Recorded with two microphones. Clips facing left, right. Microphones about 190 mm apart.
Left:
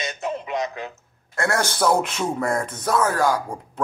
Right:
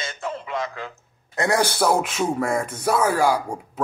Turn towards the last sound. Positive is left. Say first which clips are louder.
# right 1 dB
turn(degrees=-10)  # may be behind; listen again after turning